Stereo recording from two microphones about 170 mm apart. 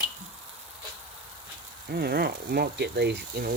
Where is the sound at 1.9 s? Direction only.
65° right (ahead or behind).